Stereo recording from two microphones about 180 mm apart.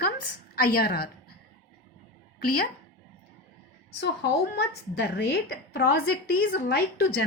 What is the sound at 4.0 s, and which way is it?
A woman's voice, 70° left (ahead or behind).